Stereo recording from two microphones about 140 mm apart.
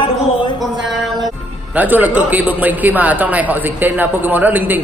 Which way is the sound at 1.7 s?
10° right (ahead or behind).